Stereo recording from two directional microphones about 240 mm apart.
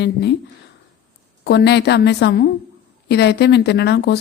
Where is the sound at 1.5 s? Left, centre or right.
Left.